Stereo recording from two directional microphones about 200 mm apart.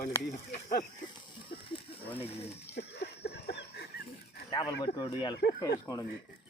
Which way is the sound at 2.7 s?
55° left (ahead or behind).